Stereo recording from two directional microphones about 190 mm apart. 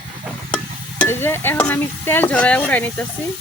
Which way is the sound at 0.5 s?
5° left (ahead or behind).